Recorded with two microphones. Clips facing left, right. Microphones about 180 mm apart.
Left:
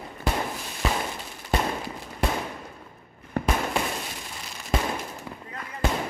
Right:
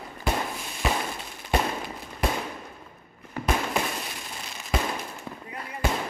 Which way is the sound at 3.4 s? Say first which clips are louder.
Left 4 dB; 60° left (ahead or behind).